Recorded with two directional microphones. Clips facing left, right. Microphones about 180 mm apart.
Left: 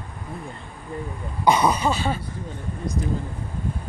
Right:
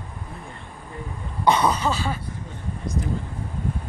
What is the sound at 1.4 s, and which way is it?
Speech, 10° left (ahead or behind).